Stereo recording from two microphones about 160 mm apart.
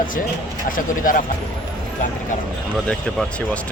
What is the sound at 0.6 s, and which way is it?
Speech, 60° left (ahead or behind).